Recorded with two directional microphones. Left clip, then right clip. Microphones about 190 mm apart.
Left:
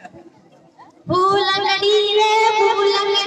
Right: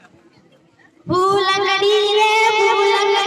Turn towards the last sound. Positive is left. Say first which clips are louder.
# right 2 dB
turn(degrees=-45)  # may be behind; listen again after turning